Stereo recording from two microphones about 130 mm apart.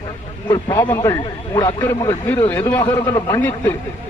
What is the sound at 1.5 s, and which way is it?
A man's voice, 20° left (ahead or behind).